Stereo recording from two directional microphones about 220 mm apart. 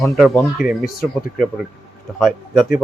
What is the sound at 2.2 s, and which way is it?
Speech, centre (ahead or behind).